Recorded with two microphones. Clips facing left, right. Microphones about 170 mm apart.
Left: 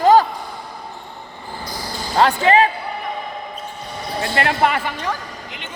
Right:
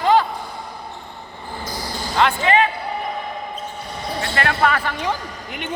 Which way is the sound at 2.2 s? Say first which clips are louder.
Left 3 dB; 35° left (ahead or behind).